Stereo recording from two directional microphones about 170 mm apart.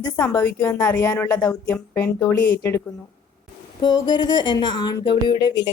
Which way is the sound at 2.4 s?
90° left.